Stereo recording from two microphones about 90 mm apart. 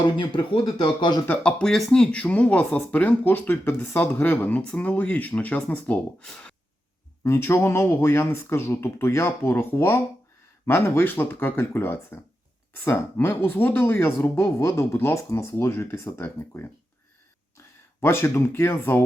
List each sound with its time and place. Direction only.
0.0 s speech: 55° left (ahead or behind)
1.3 s speech: 10° left (ahead or behind)
7.3 s speech: 30° left (ahead or behind)
18.0 s speech: 25° left (ahead or behind)